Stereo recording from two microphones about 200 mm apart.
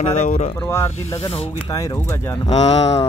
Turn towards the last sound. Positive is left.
turn(degrees=30)  # may be behind; listen again after turning